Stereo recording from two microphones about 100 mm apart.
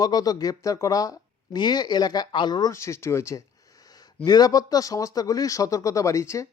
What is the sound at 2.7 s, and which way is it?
Speech, 30° left (ahead or behind).